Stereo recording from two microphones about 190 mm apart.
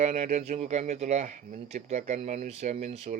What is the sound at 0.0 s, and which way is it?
Speech, 40° right (ahead or behind).